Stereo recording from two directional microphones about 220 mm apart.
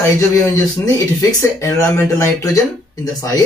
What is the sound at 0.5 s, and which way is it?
Speech, 15° left (ahead or behind).